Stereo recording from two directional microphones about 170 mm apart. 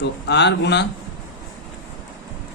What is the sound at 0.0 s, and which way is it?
Speech, 90° left.